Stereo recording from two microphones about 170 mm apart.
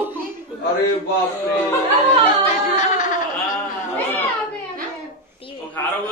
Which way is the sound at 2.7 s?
50° left (ahead or behind).